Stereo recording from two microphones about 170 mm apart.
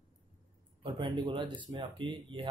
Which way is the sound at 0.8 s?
30° right (ahead or behind).